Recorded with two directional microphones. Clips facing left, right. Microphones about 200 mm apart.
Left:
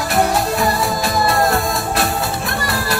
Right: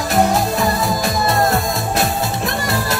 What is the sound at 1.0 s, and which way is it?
Music, 20° right (ahead or behind).